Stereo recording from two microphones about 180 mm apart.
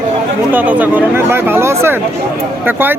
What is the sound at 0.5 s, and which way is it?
Speech, 10° right (ahead or behind).